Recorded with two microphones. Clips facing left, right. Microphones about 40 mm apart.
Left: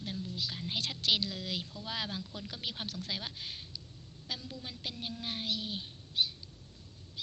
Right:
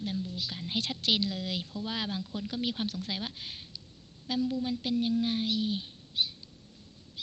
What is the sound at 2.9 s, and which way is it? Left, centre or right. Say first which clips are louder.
Speech: right 3 dB; right.